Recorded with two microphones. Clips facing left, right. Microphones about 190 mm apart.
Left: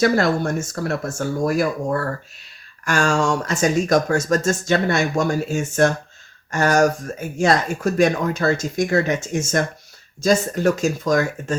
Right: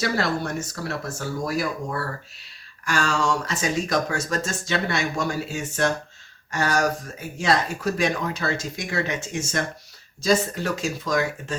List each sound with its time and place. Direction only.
0.0 s speech: 45° left (ahead or behind)